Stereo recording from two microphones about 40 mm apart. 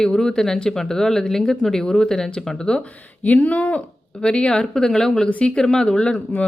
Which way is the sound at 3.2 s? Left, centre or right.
Left.